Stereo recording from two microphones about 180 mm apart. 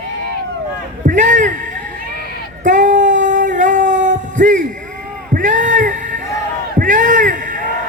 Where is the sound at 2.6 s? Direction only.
45° right (ahead or behind).